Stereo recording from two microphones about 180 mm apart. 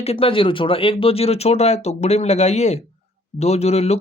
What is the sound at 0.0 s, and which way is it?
Speech, 35° left (ahead or behind).